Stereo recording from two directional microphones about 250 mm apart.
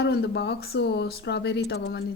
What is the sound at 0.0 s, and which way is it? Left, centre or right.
Speech, left.